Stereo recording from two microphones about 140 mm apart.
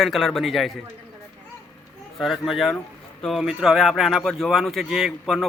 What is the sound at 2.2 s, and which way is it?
Speech, centre (ahead or behind).